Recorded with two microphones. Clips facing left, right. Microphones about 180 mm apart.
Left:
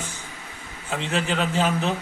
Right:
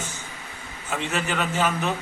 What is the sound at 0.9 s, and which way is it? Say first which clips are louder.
A man's voice: left 2 dB; 25° left (ahead or behind).